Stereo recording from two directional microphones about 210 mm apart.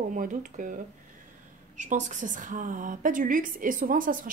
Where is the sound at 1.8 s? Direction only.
35° right (ahead or behind).